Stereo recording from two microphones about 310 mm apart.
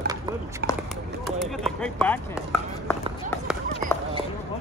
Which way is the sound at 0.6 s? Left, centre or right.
Right.